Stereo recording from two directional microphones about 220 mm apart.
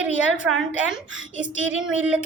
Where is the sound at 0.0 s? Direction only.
5° right (ahead or behind).